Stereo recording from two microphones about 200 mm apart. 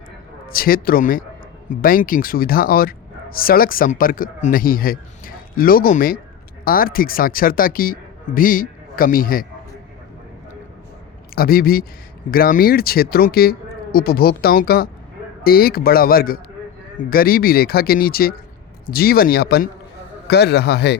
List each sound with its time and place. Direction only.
0.4 s speech: 45° left (ahead or behind)
11.3 s a man's voice: 50° left (ahead or behind)